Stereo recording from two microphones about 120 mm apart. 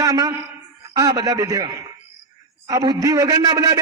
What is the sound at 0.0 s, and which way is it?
A man's voice, 30° right (ahead or behind).